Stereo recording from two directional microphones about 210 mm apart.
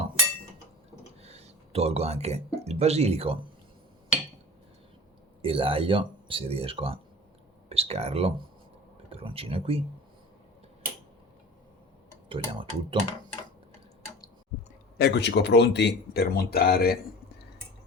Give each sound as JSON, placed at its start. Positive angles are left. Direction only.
{"t": 1.2, "sound": "speech", "side_deg": -30}
{"t": 5.4, "sound": "speech", "side_deg": -25}
{"t": 12.3, "sound": "speech", "side_deg": -25}
{"t": 14.9, "sound": "speech", "side_deg": 50}